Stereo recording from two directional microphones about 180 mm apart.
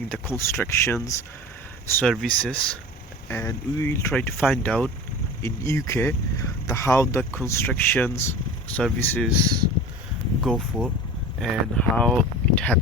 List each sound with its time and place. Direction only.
0.1 s speech: 10° left (ahead or behind)
2.0 s speech: 10° left (ahead or behind)
9.4 s speech: 20° right (ahead or behind)
10.4 s speech: 5° right (ahead or behind)